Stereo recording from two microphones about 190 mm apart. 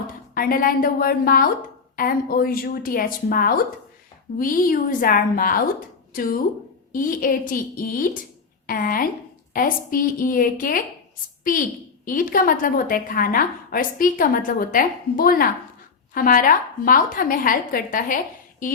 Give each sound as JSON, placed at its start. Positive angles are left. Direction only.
{"t": 0.3, "sound": "a woman's voice", "side_deg": 50}
{"t": 12.0, "sound": "a woman's voice", "side_deg": 45}